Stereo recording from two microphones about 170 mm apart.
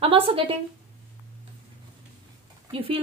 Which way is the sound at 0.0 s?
35° right (ahead or behind).